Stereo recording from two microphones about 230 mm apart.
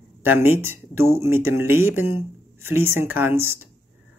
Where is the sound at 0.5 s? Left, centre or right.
Centre.